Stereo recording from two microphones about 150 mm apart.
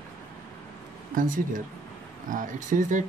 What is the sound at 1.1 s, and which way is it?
Speech, 60° right (ahead or behind).